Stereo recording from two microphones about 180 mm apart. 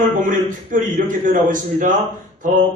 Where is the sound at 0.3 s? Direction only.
45° right (ahead or behind).